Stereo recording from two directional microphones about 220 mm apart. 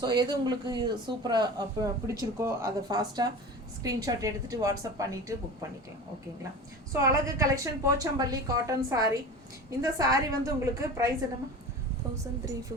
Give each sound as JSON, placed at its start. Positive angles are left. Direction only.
{"t": 0.0, "sound": "a woman's voice", "side_deg": -20}
{"t": 6.9, "sound": "a woman's voice", "side_deg": -15}